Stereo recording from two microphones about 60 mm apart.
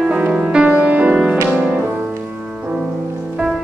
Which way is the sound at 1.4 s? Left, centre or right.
Centre.